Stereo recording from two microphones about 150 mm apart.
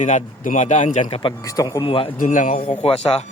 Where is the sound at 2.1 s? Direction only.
60° left (ahead or behind).